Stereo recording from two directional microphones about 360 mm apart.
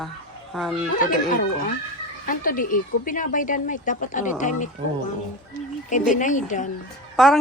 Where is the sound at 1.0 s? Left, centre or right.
Left.